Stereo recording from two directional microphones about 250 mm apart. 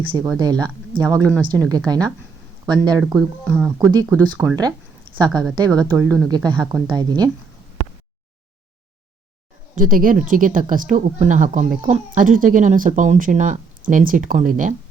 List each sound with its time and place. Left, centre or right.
0.1 s speech: centre
3.2 s speech: centre
3.8 s speech: centre
5.8 s speech: centre
6.2 s speech: centre
9.7 s speech: right